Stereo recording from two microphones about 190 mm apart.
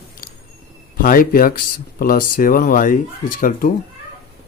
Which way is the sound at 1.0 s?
45° left (ahead or behind).